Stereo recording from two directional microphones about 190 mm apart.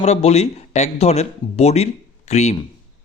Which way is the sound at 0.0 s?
35° left (ahead or behind).